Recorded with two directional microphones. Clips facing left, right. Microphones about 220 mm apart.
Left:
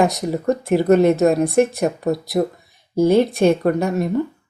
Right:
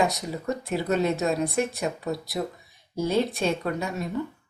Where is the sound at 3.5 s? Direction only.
50° left (ahead or behind).